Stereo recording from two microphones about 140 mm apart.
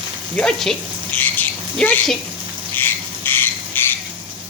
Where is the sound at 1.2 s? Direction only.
15° left (ahead or behind).